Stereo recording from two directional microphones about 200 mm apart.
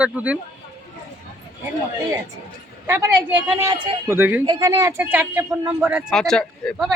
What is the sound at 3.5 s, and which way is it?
Speech, 15° right (ahead or behind).